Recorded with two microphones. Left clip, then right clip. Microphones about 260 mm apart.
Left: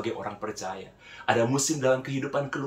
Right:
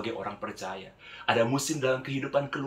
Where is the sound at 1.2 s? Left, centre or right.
Centre.